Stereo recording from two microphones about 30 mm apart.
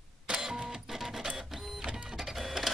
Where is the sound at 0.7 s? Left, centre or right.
Centre.